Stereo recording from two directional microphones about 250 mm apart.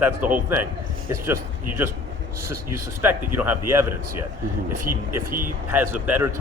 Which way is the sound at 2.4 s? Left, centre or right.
Right.